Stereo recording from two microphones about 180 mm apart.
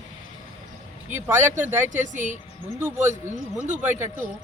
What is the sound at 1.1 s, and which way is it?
Speech, 10° right (ahead or behind).